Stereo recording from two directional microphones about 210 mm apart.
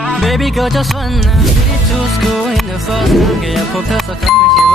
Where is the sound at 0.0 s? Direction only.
Centre (ahead or behind).